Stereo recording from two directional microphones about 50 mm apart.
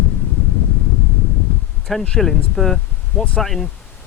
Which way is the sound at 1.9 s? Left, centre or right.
Centre.